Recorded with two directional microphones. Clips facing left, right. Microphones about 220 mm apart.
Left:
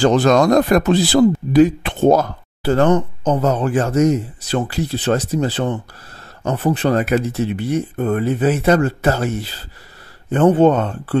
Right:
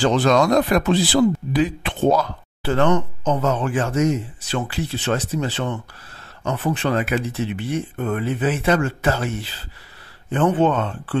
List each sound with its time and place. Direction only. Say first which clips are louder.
0.0 s speech: left 4 dB; 45° left (ahead or behind)